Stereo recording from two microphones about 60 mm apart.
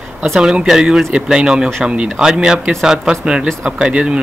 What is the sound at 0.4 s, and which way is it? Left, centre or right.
Speech, centre.